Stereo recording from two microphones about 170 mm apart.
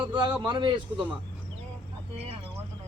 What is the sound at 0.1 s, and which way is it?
Speech, 25° right (ahead or behind).